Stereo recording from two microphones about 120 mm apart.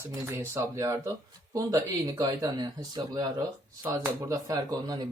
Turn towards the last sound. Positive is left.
turn(degrees=-30)  # may be behind; listen again after turning